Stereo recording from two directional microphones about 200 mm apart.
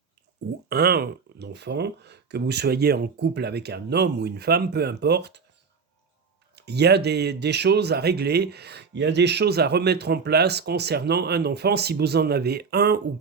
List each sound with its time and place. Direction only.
0.7 s speech: 50° right (ahead or behind)
6.6 s speech: 55° right (ahead or behind)